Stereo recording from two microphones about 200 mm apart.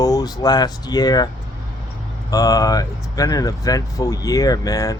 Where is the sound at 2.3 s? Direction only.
20° left (ahead or behind).